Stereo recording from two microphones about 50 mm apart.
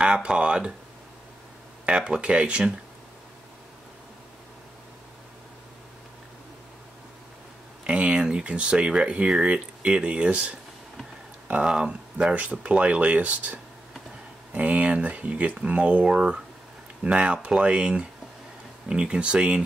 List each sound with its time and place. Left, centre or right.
0.0 s speech: centre
1.9 s speech: centre
7.8 s speech: right
11.6 s speech: centre